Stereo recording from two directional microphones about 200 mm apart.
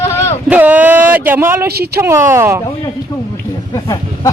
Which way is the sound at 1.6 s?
50° right (ahead or behind).